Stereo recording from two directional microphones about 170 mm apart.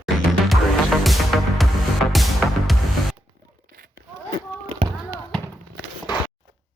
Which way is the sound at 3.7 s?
60° right (ahead or behind).